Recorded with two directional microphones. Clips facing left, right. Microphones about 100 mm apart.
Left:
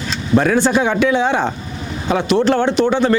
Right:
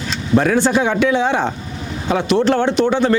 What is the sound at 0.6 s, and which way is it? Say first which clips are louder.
Speech: left 1 dB; 25° left (ahead or behind).